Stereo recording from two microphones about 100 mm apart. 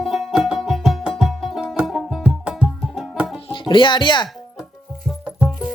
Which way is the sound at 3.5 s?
55° left (ahead or behind).